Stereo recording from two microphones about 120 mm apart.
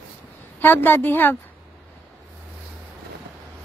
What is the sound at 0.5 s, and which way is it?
Speech, 15° left (ahead or behind).